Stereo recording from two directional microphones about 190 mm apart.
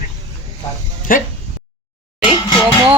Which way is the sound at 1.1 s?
45° left (ahead or behind).